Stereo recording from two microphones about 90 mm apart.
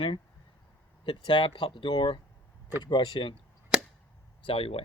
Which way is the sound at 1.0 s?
60° left (ahead or behind).